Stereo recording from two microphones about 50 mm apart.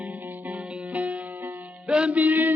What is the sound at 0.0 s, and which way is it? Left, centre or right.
Music, right.